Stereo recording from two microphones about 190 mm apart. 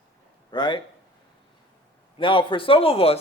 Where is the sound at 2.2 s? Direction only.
25° left (ahead or behind).